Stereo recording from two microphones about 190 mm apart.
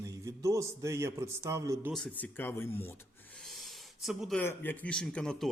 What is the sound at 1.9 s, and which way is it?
Speech, 5° left (ahead or behind).